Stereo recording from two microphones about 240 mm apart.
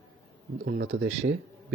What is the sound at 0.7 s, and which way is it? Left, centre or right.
Speech, right.